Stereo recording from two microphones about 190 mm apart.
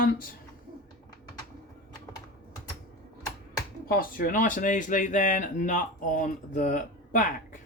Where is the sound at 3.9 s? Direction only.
50° left (ahead or behind).